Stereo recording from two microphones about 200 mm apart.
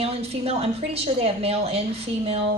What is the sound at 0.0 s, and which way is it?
A woman's voice, 30° right (ahead or behind).